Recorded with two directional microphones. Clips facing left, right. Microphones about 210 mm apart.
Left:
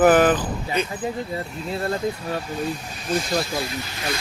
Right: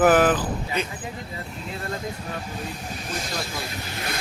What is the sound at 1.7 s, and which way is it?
Speech, 35° left (ahead or behind).